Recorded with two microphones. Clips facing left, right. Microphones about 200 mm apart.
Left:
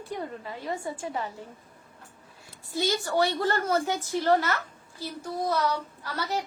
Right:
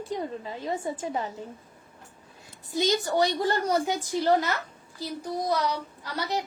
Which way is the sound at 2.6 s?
20° right (ahead or behind).